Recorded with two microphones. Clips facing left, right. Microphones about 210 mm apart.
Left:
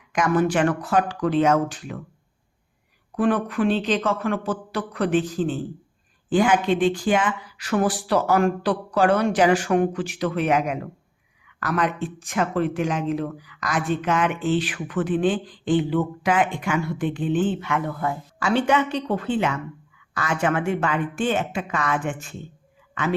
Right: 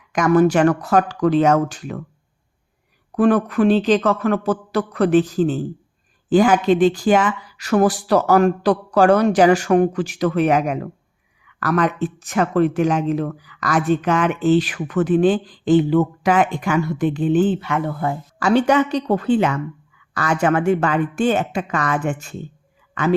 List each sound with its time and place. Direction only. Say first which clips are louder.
0.1 s speech: right 6 dB; 40° right (ahead or behind)
3.2 s speech: right 6 dB; 45° right (ahead or behind)
18.3 s speech: right 5 dB; 40° right (ahead or behind)